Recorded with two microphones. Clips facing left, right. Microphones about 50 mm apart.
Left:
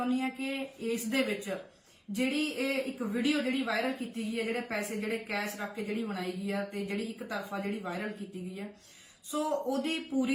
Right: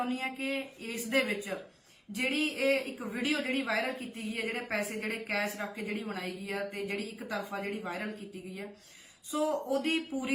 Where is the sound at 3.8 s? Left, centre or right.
Right.